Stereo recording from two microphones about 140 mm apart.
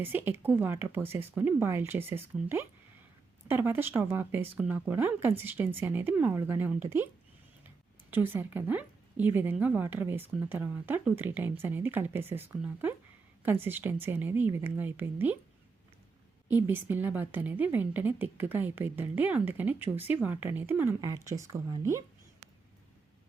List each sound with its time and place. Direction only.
0.0 s a woman's voice: 15° right (ahead or behind)
8.1 s a woman's voice: 15° right (ahead or behind)
13.4 s a woman's voice: 15° right (ahead or behind)
16.5 s a woman's voice: 15° right (ahead or behind)